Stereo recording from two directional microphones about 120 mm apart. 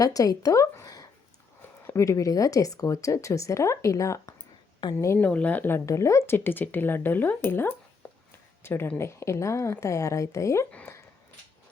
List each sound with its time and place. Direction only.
0.0 s speech: 30° left (ahead or behind)
4.8 s a woman's voice: 35° left (ahead or behind)
5.0 s speech: 15° left (ahead or behind)